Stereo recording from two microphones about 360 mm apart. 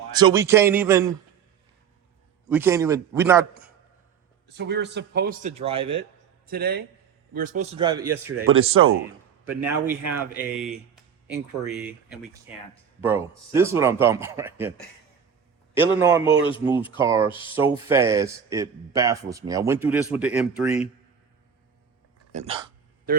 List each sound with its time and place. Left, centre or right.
0.2 s speech: centre
2.5 s speech: centre
4.4 s speech: right
6.5 s speech: right
8.4 s speech: right
9.5 s speech: centre
16.0 s speech: centre
22.3 s speech: centre